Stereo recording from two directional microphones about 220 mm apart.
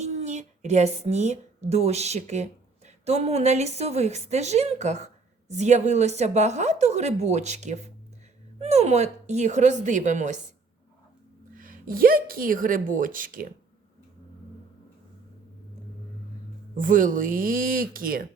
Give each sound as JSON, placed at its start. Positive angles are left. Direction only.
{"t": 0.0, "sound": "speech", "side_deg": -30}
{"t": 11.5, "sound": "speech", "side_deg": -40}
{"t": 16.7, "sound": "speech", "side_deg": -35}